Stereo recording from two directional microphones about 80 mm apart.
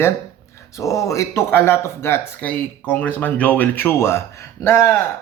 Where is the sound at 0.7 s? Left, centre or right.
Left.